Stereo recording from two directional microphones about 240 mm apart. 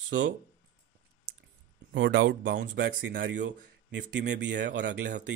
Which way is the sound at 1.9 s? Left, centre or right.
Right.